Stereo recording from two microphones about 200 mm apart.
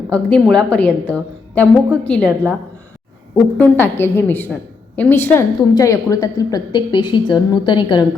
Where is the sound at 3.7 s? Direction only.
10° left (ahead or behind).